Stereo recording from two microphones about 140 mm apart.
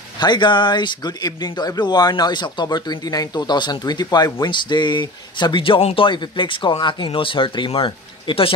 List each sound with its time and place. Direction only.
0.2 s speech: 30° left (ahead or behind)